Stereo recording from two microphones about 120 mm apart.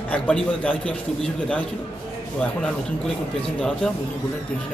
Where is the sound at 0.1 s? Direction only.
10° left (ahead or behind).